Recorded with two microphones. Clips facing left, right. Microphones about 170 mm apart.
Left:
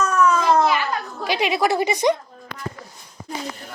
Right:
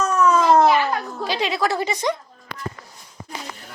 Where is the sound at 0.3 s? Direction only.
25° right (ahead or behind).